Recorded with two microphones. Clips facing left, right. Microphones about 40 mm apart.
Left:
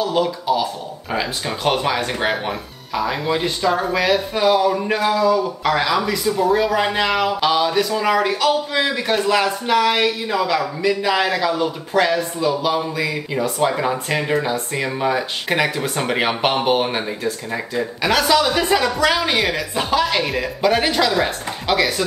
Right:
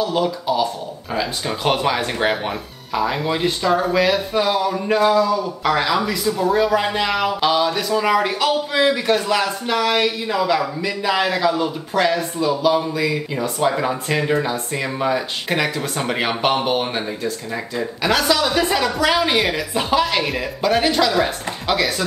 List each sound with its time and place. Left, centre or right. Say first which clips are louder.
0.0 s speech: even; centre